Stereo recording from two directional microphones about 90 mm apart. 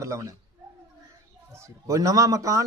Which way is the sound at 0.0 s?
35° right (ahead or behind).